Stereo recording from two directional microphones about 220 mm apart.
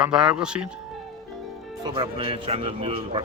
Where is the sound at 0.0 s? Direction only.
5° right (ahead or behind).